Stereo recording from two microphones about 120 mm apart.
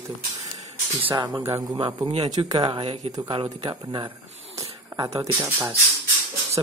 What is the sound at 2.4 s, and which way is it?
Speech, 35° right (ahead or behind).